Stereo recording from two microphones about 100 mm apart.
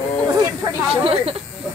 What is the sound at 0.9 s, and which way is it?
Speech, 75° right (ahead or behind).